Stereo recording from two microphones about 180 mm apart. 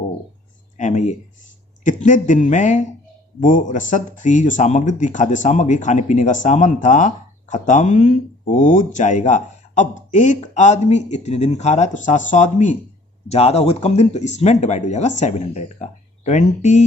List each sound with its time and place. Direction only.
0.8 s speech: 40° left (ahead or behind)